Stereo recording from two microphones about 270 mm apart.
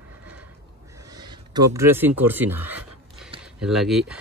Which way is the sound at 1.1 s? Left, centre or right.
Centre.